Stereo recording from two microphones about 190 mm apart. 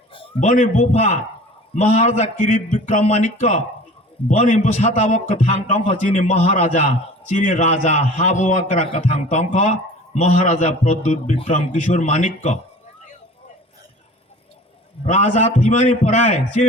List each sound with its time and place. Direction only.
0.3 s a man's voice: 40° left (ahead or behind)
15.0 s a man's voice: 40° left (ahead or behind)